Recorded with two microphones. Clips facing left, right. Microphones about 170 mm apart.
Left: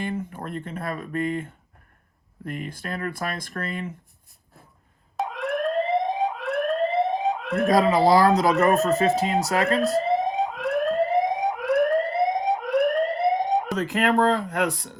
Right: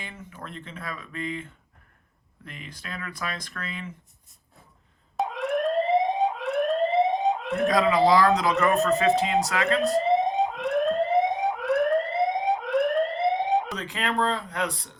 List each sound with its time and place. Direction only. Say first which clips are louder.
0.0 s speech: left 11 dB; 50° left (ahead or behind)
5.1 s fire alarm: right 1 dB; centre (ahead or behind)
7.7 s speech: left 2 dB; 40° left (ahead or behind)
9.8 s fire alarm: even; centre (ahead or behind)
13.7 s speech: left 7 dB; 45° left (ahead or behind)